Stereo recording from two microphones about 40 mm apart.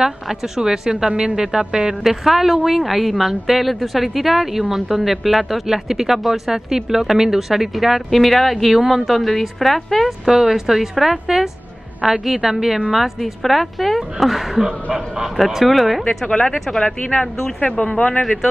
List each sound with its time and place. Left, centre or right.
0.0 s a woman's voice: centre
8.1 s a woman's voice: centre
10.2 s a woman's voice: centre
14.6 s speech: centre
15.3 s a woman's voice: centre
17.6 s speech: left